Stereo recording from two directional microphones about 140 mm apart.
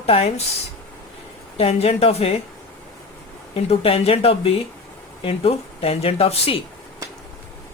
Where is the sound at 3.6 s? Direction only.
45° left (ahead or behind).